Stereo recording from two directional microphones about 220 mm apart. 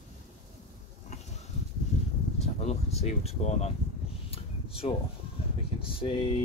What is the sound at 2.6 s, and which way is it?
Speech, 30° left (ahead or behind).